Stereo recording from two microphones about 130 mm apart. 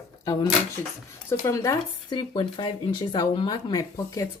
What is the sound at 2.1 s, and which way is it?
Speech, 35° left (ahead or behind).